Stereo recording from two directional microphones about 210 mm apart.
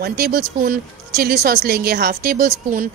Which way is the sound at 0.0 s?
50° right (ahead or behind).